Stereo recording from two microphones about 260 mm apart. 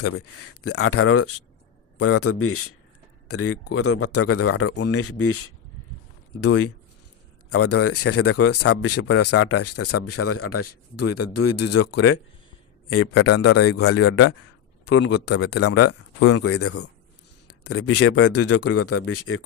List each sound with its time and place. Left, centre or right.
0.0 s speech: left
12.9 s speech: left
14.0 s speech: left
15.1 s speech: left
15.6 s speech: left